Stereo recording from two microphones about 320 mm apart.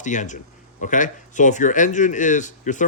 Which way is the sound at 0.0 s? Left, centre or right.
Left.